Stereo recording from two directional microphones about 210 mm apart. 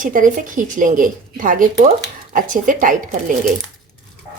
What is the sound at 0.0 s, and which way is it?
A woman's voice, 40° right (ahead or behind).